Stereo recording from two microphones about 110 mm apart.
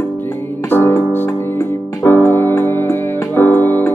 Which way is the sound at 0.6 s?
20° left (ahead or behind).